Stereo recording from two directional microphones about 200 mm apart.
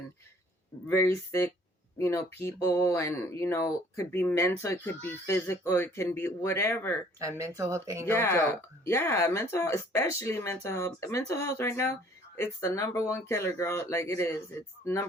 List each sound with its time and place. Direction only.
0.9 s speech: 10° left (ahead or behind)
7.2 s speech: 15° right (ahead or behind)
8.1 s speech: 10° left (ahead or behind)